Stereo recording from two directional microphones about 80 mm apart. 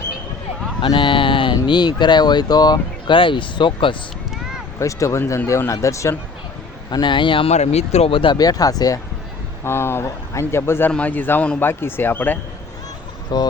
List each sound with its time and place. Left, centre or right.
0.8 s a sound: left
1.6 s speech: left
4.8 s speech: left
6.9 s speech: left
8.4 s speech: left
9.6 s a man's voice: left
13.3 s speech: left